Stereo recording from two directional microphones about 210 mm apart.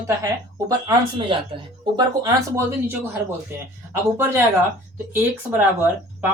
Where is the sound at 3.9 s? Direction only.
10° right (ahead or behind).